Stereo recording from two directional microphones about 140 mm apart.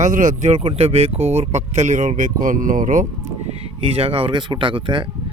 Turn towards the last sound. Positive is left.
turn(degrees=-35)  # may be behind; listen again after turning